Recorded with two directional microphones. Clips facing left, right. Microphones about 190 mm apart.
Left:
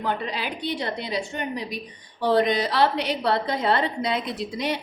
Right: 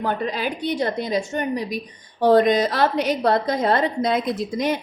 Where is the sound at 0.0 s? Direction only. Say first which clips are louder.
Right 4 dB; 45° right (ahead or behind).